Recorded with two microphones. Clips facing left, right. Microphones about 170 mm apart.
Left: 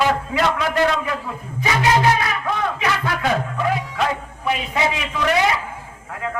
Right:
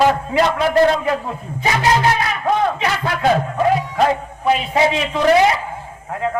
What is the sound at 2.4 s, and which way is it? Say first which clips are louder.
A man's voice: right 8 dB; 40° right (ahead or behind).